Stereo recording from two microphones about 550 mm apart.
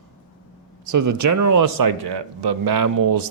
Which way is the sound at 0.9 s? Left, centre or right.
Right.